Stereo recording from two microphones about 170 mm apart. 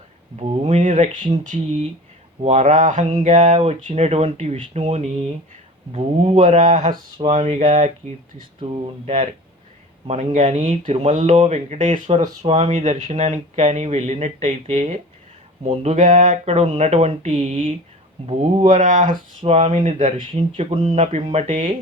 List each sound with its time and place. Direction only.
0.3 s speech: 40° right (ahead or behind)
20.1 s speech: 35° right (ahead or behind)